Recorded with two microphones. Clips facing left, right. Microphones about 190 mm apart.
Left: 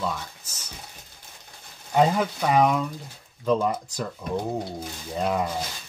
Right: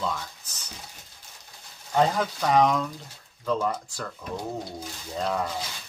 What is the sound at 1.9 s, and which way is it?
Speech, 10° left (ahead or behind).